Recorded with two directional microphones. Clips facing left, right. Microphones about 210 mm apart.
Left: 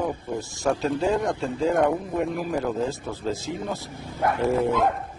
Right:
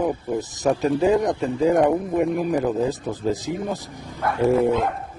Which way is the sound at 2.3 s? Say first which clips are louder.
Right 4 dB; 15° right (ahead or behind).